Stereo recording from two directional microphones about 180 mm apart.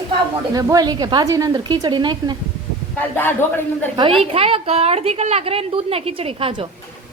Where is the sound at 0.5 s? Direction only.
20° right (ahead or behind).